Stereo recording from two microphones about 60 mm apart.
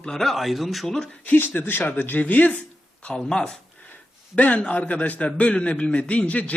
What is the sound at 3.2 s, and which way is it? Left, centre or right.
Speech, centre.